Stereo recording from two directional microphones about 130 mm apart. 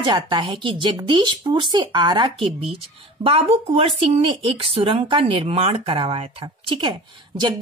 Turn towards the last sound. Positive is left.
turn(degrees=-35)  # may be behind; listen again after turning